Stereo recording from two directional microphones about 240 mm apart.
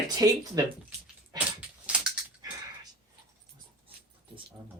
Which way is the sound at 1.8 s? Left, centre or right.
Centre.